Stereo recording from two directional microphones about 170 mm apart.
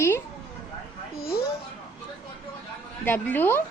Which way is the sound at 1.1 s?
65° left (ahead or behind).